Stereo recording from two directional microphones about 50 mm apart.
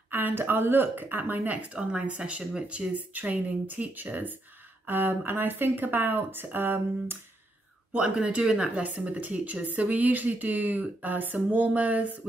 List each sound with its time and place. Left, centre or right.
0.1 s speech: right
7.9 s speech: right